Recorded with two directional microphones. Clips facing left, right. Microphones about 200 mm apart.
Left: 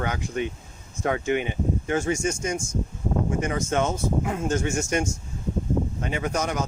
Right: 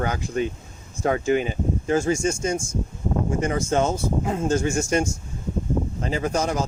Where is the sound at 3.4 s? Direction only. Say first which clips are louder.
Right 5 dB; 30° right (ahead or behind).